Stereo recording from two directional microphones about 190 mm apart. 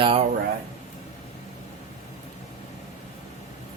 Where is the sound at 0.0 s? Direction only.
30° right (ahead or behind).